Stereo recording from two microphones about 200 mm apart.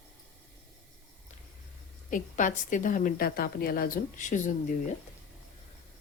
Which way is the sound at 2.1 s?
40° left (ahead or behind).